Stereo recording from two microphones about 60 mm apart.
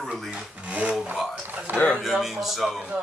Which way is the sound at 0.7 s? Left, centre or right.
Right.